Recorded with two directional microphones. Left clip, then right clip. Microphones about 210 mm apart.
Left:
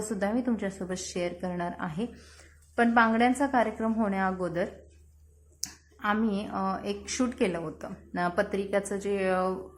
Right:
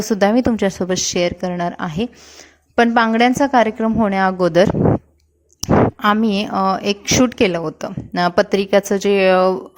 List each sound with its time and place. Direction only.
0.1 s a woman's voice: 40° right (ahead or behind)
6.0 s a woman's voice: 45° right (ahead or behind)